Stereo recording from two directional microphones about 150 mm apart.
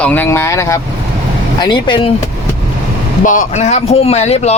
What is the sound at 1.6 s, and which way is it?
Speech, 30° left (ahead or behind).